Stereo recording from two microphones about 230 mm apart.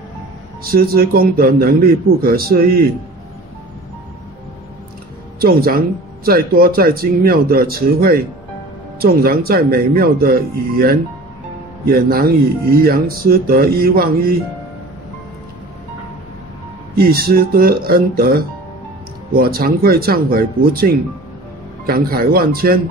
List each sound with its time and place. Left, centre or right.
0.7 s speech: right
5.4 s speech: right
16.9 s speech: right